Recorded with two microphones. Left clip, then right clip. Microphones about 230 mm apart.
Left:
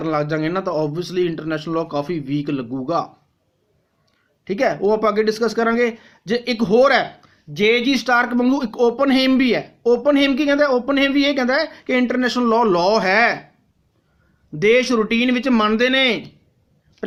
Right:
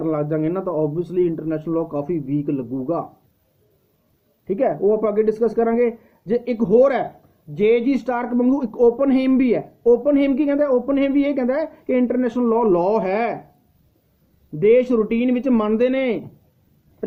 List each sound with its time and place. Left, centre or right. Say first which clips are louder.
0.0 s speech: left 1 dB; centre
2.0 s a man's voice: left 1 dB; left
2.4 s speech: even; centre
4.4 s speech: even; centre
14.6 s speech: even; centre